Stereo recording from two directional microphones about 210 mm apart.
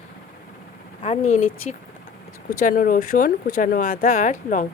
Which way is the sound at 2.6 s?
40° left (ahead or behind).